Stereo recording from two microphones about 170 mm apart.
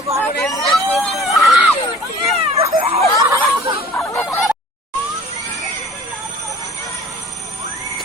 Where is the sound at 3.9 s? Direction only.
10° left (ahead or behind).